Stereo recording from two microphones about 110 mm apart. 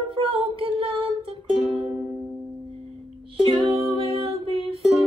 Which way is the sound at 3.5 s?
55° right (ahead or behind).